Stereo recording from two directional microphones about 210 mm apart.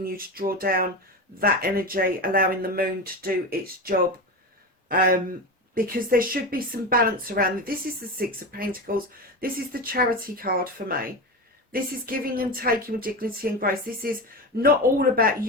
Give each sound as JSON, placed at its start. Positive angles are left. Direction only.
{"t": 0.0, "sound": "speech", "side_deg": -45}
{"t": 4.9, "sound": "speech", "side_deg": -45}